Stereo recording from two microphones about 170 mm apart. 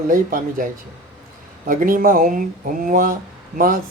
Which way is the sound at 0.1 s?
55° right (ahead or behind).